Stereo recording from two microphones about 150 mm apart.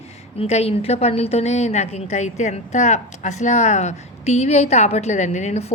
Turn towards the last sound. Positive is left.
turn(degrees=45)  # may be behind; listen again after turning